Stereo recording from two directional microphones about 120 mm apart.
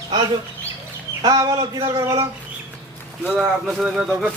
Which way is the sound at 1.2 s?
30° right (ahead or behind).